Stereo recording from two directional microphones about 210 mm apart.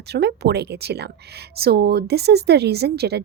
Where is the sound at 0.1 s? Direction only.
50° right (ahead or behind).